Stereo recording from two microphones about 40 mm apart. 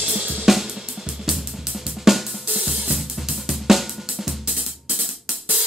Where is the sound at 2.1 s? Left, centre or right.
Centre.